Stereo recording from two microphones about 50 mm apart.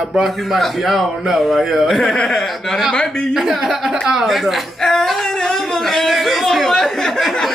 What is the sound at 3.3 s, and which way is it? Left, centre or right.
A man's voice, centre.